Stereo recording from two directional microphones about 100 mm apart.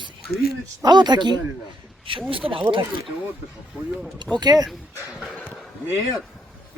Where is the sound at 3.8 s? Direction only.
15° right (ahead or behind).